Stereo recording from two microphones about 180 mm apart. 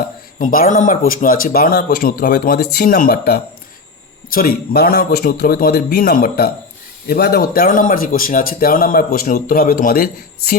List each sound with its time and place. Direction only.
0.3 s a man's voice: 50° left (ahead or behind)